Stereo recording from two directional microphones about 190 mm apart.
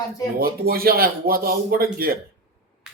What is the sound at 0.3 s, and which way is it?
A man's voice, 50° right (ahead or behind).